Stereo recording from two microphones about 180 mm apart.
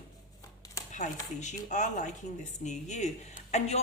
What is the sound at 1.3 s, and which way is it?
A woman's voice, 40° left (ahead or behind).